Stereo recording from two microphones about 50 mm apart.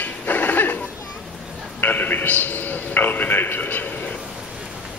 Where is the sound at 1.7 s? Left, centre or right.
Left.